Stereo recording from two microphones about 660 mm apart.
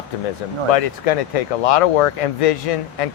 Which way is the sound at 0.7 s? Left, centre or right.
Left.